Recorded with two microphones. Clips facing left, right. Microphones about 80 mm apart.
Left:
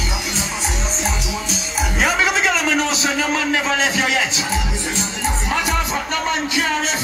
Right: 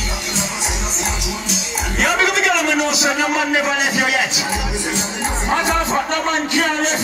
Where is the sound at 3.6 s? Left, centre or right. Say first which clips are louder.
Right 1 dB; centre.